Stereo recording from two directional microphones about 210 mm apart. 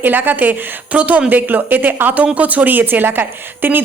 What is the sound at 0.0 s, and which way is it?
A woman's voice, 10° right (ahead or behind).